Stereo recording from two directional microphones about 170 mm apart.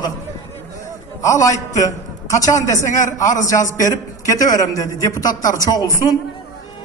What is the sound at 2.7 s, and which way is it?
A man's voice, 45° left (ahead or behind).